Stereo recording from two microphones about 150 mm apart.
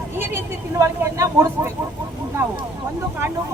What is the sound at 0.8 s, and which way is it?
Speech, 15° right (ahead or behind).